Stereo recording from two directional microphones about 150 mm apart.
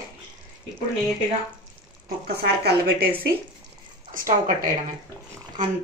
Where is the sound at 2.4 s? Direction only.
90° right.